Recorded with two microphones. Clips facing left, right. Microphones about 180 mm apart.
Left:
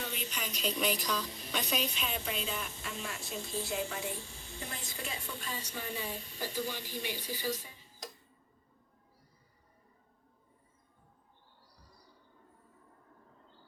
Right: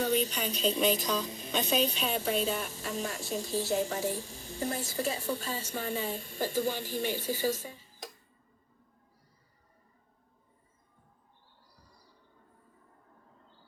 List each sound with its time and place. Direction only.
0.0 s a woman's voice: 40° right (ahead or behind)